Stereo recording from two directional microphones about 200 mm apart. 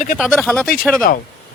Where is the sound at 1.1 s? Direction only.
45° left (ahead or behind).